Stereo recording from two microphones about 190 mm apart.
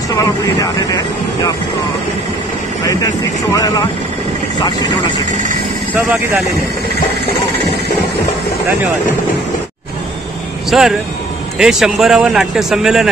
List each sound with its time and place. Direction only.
0.2 s speech: 20° left (ahead or behind)
3.5 s speech: 20° left (ahead or behind)
10.7 s a man's voice: centre (ahead or behind)